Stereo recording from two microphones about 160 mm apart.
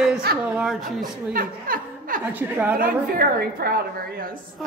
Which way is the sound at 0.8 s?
60° right (ahead or behind).